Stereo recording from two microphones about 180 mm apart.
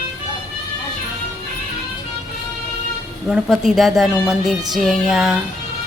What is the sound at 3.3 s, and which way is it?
Speech, 5° right (ahead or behind).